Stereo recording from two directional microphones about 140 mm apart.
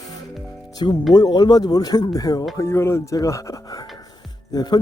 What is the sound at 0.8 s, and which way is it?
Speech, 35° left (ahead or behind).